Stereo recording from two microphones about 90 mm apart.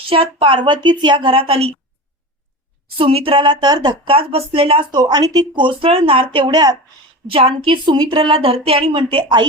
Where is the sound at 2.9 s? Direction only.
90° right; by 3.9 s 50° right (ahead or behind).